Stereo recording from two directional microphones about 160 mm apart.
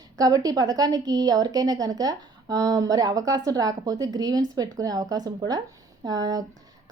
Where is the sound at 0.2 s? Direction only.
20° right (ahead or behind).